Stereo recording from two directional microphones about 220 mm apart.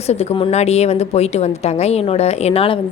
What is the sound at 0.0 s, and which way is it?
A woman's voice, 30° left (ahead or behind).